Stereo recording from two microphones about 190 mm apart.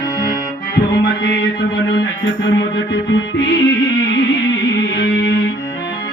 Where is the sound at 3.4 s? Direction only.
65° left (ahead or behind).